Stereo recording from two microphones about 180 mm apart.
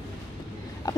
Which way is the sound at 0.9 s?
20° left (ahead or behind).